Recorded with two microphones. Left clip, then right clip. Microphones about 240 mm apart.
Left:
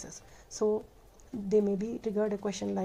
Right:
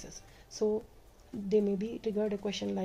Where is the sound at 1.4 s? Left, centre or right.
Centre.